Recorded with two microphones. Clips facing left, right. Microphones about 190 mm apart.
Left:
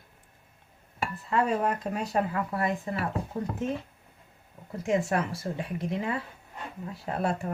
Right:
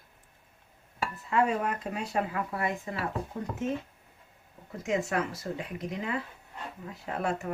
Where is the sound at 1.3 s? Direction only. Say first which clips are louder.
Left 1 dB; 40° left (ahead or behind).